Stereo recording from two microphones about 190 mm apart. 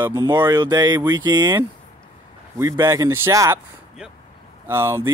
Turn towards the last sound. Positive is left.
turn(degrees=-15)  # may be behind; listen again after turning